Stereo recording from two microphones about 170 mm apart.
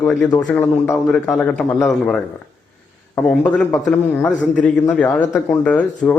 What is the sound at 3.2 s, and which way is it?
A man's voice, 5° left (ahead or behind).